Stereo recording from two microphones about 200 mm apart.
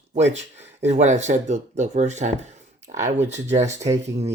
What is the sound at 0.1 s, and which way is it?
Speech, 35° right (ahead or behind).